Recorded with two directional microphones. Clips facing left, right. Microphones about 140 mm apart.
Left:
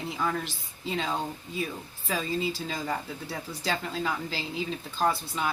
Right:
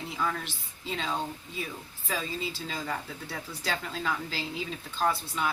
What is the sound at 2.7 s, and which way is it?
Speech, 15° left (ahead or behind).